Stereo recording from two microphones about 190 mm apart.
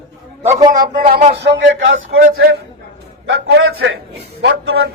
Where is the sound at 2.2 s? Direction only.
50° right (ahead or behind).